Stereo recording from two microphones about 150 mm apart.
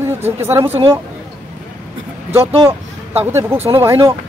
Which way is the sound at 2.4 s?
40° right (ahead or behind).